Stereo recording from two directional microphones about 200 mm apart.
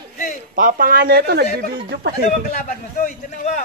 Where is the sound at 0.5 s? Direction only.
45° right (ahead or behind).